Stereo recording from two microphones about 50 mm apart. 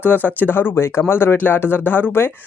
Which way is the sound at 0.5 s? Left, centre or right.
Left.